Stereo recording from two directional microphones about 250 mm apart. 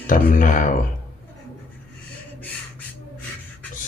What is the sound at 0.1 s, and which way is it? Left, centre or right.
Speech, left.